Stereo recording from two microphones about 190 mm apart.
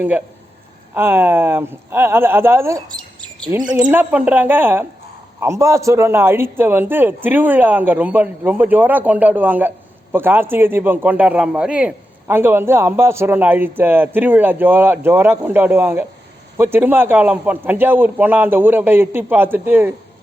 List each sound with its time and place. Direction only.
0.9 s a man's voice: 10° right (ahead or behind)